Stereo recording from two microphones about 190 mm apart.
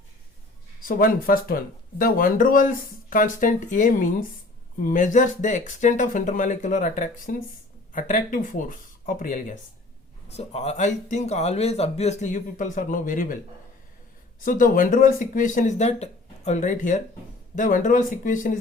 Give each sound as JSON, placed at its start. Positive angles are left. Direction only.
{"t": 0.8, "sound": "speech", "side_deg": 45}
{"t": 14.4, "sound": "speech", "side_deg": 45}